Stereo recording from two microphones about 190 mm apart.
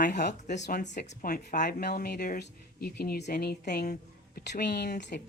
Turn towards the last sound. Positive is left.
turn(degrees=60)  # may be behind; listen again after turning